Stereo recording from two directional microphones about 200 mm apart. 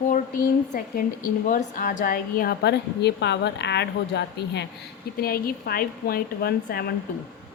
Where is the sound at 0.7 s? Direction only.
45° left (ahead or behind).